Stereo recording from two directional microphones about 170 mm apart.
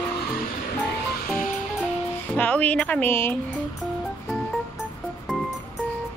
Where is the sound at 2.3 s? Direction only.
10° left (ahead or behind).